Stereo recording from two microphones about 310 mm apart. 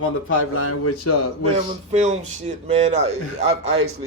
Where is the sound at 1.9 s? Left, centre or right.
Right.